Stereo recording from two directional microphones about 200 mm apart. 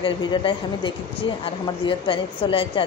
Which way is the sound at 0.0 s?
25° left (ahead or behind).